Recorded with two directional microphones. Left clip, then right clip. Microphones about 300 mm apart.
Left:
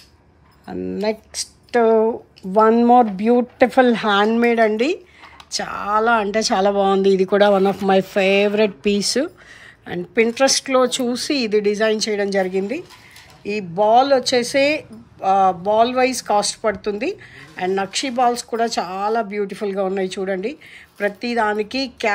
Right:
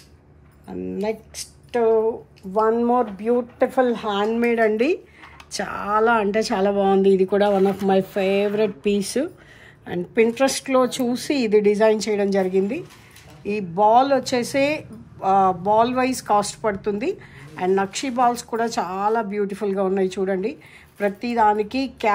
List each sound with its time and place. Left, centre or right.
1.3 s a woman's voice: centre
1.9 s a woman's voice: left; by 22.1 s centre